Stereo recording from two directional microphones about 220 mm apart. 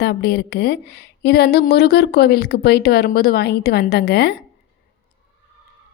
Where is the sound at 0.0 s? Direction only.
45° left (ahead or behind).